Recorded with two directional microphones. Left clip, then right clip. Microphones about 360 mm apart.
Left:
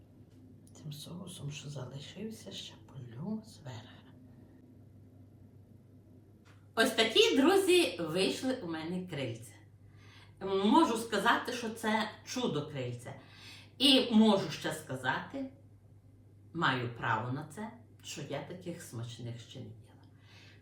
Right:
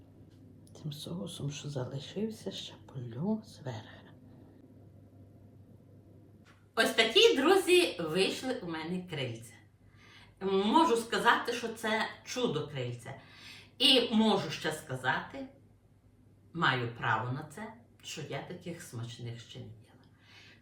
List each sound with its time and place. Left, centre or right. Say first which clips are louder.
0.7 s speech: right 5 dB; centre
6.7 s a woman's voice: right 1 dB; centre
16.5 s a woman's voice: right 2 dB; centre